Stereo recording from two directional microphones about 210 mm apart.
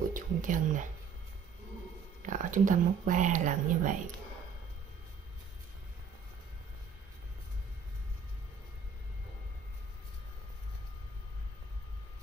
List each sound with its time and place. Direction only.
0.1 s speech: 40° right (ahead or behind)
2.2 s speech: 40° right (ahead or behind)